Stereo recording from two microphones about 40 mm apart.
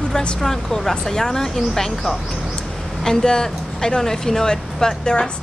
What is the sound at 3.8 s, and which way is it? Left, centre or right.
Speech, centre.